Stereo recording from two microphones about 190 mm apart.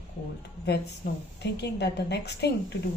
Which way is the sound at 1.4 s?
60° left (ahead or behind).